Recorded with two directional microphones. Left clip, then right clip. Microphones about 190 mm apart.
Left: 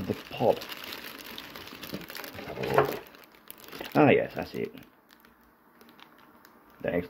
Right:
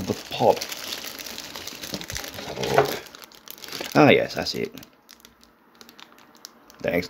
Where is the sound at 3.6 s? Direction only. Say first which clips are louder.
Right 6 dB; 20° right (ahead or behind).